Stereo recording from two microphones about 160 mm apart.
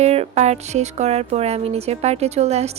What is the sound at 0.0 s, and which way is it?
Speech, 40° right (ahead or behind).